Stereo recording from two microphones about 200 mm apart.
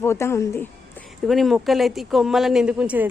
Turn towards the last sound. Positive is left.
turn(degrees=-5)  # may be behind; listen again after turning